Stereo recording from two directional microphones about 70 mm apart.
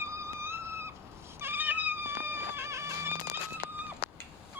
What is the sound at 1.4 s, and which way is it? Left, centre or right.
Cat, right.